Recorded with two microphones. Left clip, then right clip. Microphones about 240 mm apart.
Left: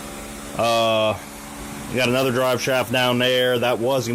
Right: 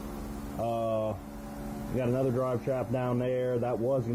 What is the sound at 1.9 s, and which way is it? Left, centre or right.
Speech, left.